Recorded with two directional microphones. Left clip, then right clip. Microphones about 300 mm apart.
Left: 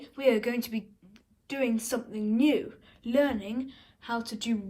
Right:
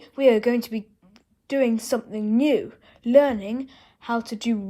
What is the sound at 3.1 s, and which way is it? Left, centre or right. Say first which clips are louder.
A woman's voice: right 9 dB; centre.